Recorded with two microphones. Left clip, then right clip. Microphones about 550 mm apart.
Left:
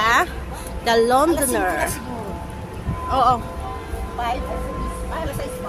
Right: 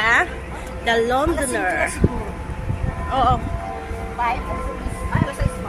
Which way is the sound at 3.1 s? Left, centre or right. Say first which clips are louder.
Left 1 dB; left.